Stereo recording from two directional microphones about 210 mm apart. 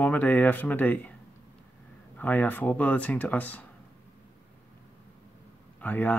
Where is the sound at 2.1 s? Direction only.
10° left (ahead or behind).